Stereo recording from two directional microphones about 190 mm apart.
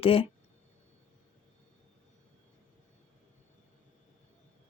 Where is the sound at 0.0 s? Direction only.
30° left (ahead or behind).